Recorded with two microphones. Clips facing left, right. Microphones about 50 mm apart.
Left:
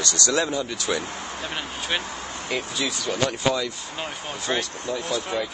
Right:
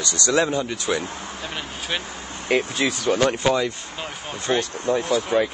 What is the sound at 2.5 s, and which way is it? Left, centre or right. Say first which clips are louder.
Speech: right 7 dB; right.